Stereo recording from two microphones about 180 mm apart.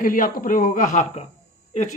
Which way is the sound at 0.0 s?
50° left (ahead or behind).